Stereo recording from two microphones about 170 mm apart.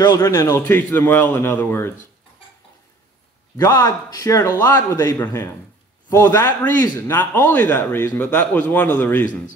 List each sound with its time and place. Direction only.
0.0 s a man's voice: 20° left (ahead or behind)
3.5 s a man's voice: 20° left (ahead or behind)